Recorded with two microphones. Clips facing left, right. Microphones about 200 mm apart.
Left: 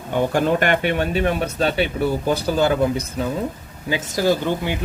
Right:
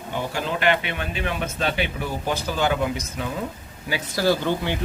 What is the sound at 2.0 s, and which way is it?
Speech, 30° left (ahead or behind).